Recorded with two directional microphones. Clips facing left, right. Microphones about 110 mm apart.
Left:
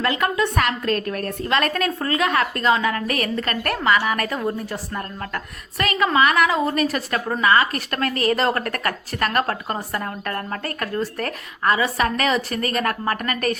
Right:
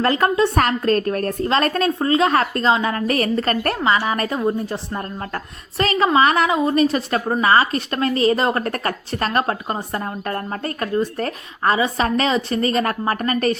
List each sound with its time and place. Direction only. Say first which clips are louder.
0.0 s a woman's voice: right 4 dB; 35° right (ahead or behind)